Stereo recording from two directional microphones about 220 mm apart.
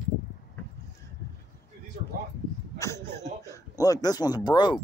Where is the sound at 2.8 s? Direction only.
10° left (ahead or behind).